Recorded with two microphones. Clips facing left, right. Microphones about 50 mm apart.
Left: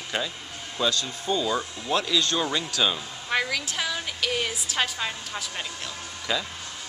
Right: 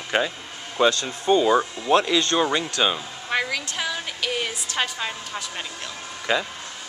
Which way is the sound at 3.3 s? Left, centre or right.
Centre.